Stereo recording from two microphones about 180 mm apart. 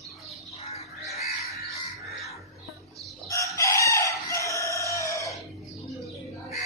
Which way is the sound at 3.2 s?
15° left (ahead or behind).